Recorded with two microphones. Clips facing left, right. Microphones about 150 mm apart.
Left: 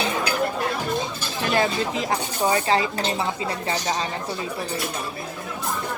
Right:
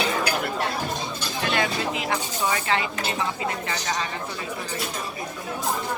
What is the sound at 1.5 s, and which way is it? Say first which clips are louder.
Speech: left 5 dB; 35° left (ahead or behind).